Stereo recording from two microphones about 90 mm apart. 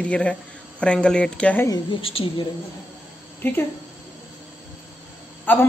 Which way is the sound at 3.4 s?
25° left (ahead or behind).